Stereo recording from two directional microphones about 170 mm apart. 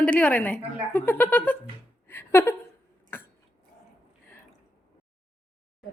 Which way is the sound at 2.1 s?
10° left (ahead or behind).